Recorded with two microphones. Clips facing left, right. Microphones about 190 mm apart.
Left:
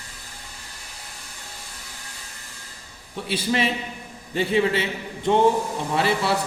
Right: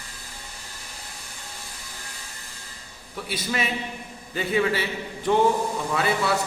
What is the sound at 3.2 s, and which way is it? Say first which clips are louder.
A man's voice: left 5 dB; 30° left (ahead or behind).